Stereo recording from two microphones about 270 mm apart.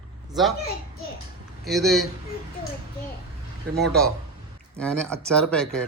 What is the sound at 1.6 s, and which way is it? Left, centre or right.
Speech, centre.